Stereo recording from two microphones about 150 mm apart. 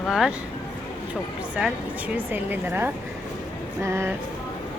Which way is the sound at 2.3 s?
15° right (ahead or behind).